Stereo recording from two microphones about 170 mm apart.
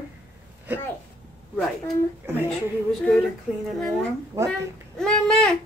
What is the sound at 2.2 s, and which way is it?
Speech, 10° right (ahead or behind).